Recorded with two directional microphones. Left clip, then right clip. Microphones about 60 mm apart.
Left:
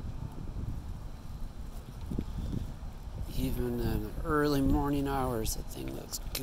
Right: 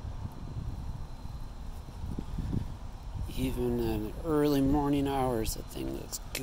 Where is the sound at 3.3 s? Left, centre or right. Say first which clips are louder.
Right 3 dB; right.